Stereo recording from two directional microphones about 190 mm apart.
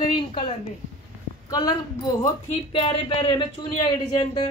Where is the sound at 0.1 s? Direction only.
25° left (ahead or behind).